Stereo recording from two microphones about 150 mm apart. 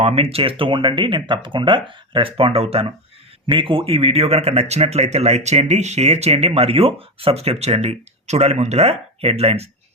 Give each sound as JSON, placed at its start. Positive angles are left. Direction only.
{"t": 0.0, "sound": "speech", "side_deg": -40}